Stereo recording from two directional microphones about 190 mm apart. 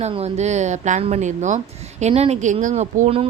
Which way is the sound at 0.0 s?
35° right (ahead or behind).